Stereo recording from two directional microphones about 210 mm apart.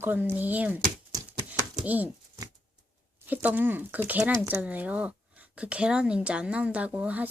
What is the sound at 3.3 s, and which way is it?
Speech, 10° right (ahead or behind).